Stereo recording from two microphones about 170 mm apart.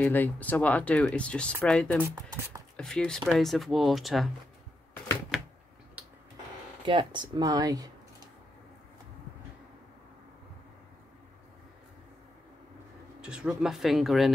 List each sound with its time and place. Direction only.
0.0 s speech: 10° left (ahead or behind)
2.0 s speech: 15° right (ahead or behind)
2.8 s speech: 5° left (ahead or behind)
5.3 s a sound: 5° right (ahead or behind)
6.9 s speech: 30° right (ahead or behind)
13.2 s speech: 5° right (ahead or behind)